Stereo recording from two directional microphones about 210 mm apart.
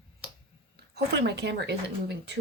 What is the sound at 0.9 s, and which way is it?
Speech, 55° right (ahead or behind).